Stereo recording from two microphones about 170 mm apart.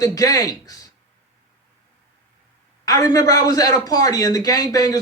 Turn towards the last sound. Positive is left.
turn(degrees=20)  # may be behind; listen again after turning